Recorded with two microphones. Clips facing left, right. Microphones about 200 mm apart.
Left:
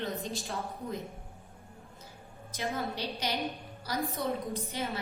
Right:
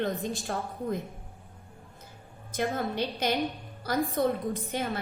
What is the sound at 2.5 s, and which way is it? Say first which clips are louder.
A woman's voice: right 5 dB; 55° right (ahead or behind).